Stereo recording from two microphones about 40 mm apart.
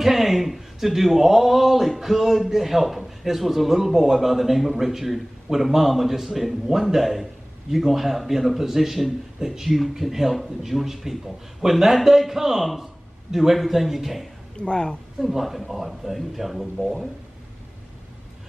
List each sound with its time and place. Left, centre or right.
0.0 s speech: centre
14.6 s a woman's voice: left
15.1 s speech: centre